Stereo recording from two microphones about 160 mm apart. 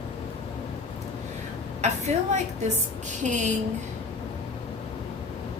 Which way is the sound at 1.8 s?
45° right (ahead or behind).